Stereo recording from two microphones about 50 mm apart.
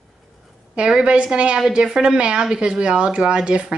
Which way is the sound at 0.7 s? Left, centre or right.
Centre.